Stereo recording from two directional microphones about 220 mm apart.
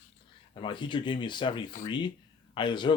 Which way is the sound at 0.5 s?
20° left (ahead or behind).